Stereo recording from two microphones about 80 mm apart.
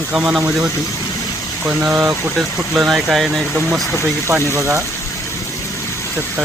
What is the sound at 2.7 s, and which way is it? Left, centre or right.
Speech, centre.